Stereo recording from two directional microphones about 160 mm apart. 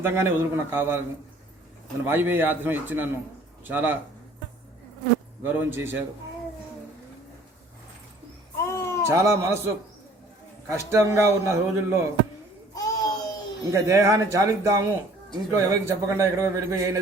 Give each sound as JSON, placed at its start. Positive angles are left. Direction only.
{"t": 0.0, "sound": "a man's voice", "side_deg": -15}
{"t": 2.0, "sound": "a man's voice", "side_deg": -10}
{"t": 5.4, "sound": "a man's voice", "side_deg": -15}
{"t": 8.5, "sound": "a sound", "side_deg": 15}
{"t": 9.0, "sound": "a man's voice", "side_deg": -20}
{"t": 10.7, "sound": "a man's voice", "side_deg": -20}
{"t": 12.7, "sound": "a sound", "side_deg": 25}
{"t": 13.7, "sound": "speech", "side_deg": -20}